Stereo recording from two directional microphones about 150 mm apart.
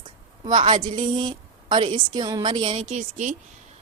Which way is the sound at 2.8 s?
55° right (ahead or behind).